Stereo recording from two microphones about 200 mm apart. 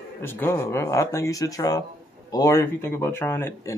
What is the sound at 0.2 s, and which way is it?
Speech, 10° left (ahead or behind).